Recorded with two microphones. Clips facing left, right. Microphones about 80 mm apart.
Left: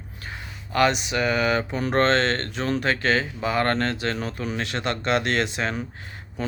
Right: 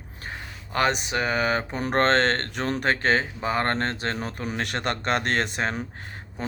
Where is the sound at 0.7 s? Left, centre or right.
Right.